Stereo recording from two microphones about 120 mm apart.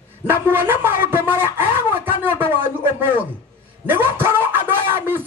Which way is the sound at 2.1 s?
15° right (ahead or behind).